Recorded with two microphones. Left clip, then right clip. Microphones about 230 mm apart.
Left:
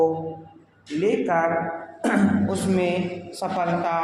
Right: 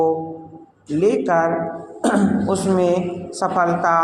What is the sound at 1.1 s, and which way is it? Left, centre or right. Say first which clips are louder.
A man's voice: right 4 dB; right.